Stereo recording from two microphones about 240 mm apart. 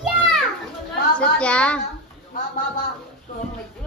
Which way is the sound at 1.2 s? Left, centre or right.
Centre.